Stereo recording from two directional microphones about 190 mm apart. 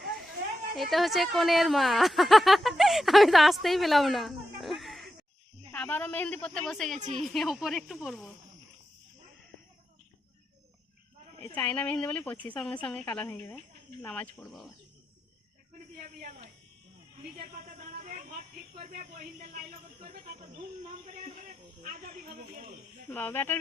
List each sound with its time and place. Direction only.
0.8 s a woman's voice: centre (ahead or behind)
11.5 s a woman's voice: 10° left (ahead or behind)
16.0 s a sound: 45° right (ahead or behind)
18.0 s a sound: 45° right (ahead or behind)
18.8 s speech: 45° right (ahead or behind)
21.8 s speech: 40° right (ahead or behind)
23.0 s a woman's voice: 10° left (ahead or behind)